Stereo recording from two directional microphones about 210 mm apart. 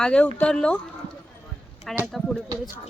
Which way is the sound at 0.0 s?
5° left (ahead or behind).